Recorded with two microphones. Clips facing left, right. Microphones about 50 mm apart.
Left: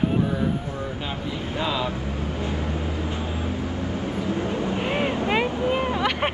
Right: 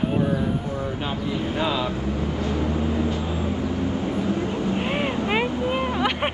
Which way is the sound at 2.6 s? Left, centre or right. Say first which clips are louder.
Right 5 dB; right.